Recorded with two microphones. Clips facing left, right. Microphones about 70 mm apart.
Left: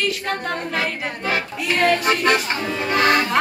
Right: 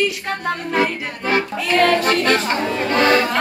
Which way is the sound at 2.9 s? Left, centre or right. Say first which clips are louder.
Right 2 dB; centre.